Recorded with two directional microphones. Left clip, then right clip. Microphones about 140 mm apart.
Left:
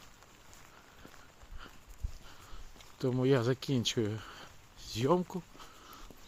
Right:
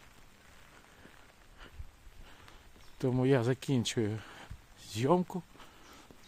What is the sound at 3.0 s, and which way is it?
Speech, 20° right (ahead or behind).